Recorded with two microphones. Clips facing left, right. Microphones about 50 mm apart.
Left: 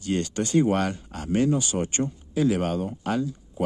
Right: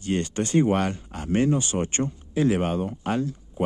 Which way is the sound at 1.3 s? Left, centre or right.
Right.